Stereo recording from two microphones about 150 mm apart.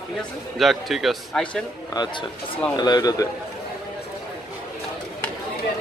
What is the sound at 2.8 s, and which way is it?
Speech, 25° left (ahead or behind).